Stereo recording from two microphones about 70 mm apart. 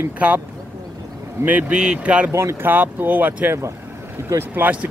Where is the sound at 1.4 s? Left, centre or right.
Centre.